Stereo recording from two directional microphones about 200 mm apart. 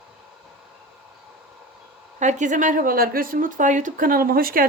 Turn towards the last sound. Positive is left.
turn(degrees=-45)  # may be behind; listen again after turning